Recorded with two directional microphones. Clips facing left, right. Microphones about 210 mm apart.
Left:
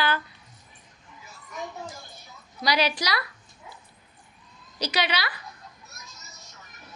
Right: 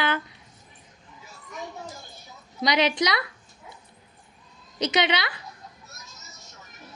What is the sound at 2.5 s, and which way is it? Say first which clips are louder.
Speech: right 3 dB; 20° right (ahead or behind).